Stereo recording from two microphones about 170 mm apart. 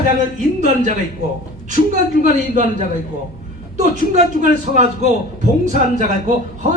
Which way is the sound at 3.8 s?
45° right (ahead or behind).